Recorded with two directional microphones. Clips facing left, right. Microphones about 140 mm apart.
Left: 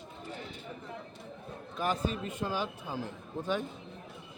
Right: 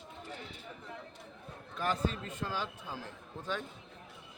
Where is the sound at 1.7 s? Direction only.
15° left (ahead or behind).